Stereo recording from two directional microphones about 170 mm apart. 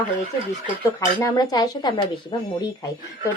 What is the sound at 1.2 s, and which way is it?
Speech, 25° left (ahead or behind).